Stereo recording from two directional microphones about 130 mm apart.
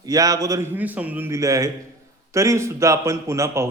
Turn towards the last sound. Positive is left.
turn(degrees=-20)  # may be behind; listen again after turning